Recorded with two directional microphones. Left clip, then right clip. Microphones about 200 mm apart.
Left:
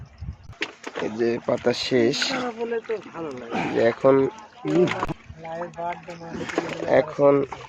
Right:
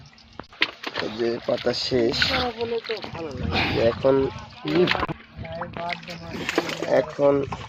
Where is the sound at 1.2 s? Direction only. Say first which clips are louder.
Left 2 dB; 30° left (ahead or behind).